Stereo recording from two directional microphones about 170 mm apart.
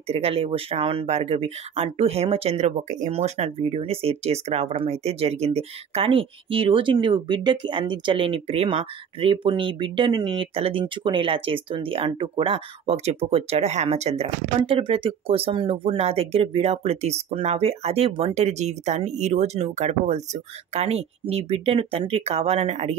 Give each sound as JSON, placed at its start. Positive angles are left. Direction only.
{"t": 0.1, "sound": "speech", "side_deg": -35}